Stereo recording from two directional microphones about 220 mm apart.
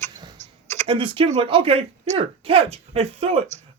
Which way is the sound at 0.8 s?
25° right (ahead or behind).